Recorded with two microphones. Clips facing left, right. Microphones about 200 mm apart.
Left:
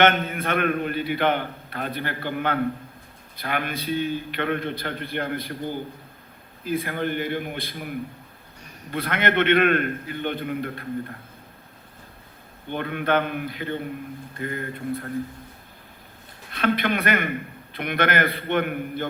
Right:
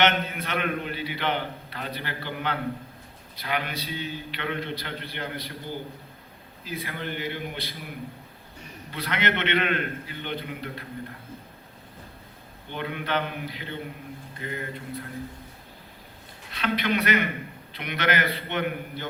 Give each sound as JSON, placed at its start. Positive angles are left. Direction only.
{"t": 0.0, "sound": "a man's voice", "side_deg": 50}
{"t": 6.7, "sound": "a man's voice", "side_deg": 50}
{"t": 8.9, "sound": "a man's voice", "side_deg": 50}
{"t": 12.7, "sound": "a man's voice", "side_deg": 50}
{"t": 16.5, "sound": "a man's voice", "side_deg": 50}